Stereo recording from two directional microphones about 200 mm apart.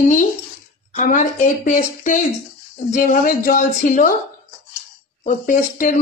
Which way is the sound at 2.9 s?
45° left (ahead or behind).